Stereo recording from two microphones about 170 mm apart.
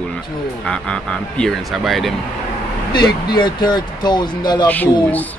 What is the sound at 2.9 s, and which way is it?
Speech, 25° left (ahead or behind).